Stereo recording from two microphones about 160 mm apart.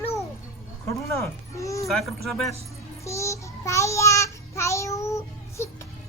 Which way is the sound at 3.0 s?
20° left (ahead or behind).